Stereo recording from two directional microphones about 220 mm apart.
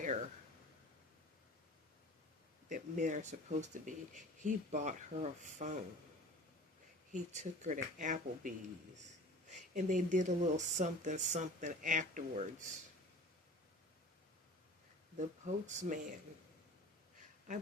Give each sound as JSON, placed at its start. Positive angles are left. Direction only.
{"t": 2.6, "sound": "speech", "side_deg": -35}
{"t": 7.1, "sound": "speech", "side_deg": -35}
{"t": 15.4, "sound": "speech", "side_deg": -35}